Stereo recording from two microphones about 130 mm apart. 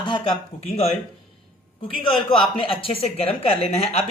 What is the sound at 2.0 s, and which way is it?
Speech, 40° left (ahead or behind).